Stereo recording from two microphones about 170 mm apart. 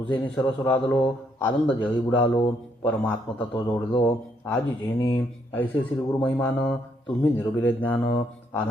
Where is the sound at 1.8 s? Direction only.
30° left (ahead or behind).